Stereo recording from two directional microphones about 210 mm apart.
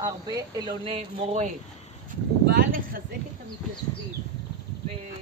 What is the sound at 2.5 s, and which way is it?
Speech, 45° right (ahead or behind).